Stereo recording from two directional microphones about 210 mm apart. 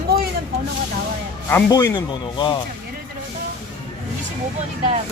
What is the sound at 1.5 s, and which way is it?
Speech, 15° left (ahead or behind).